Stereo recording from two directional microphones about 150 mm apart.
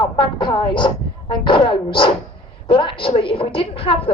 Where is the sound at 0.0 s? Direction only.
30° left (ahead or behind).